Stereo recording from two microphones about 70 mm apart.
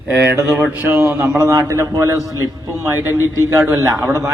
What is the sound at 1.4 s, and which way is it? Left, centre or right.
A man's voice, right.